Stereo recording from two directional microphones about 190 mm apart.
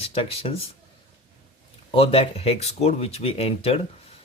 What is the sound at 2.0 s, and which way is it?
Speech, 30° left (ahead or behind).